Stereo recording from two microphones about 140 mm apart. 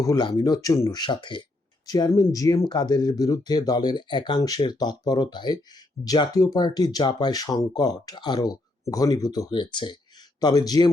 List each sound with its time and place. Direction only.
0.0 s speech: 30° left (ahead or behind)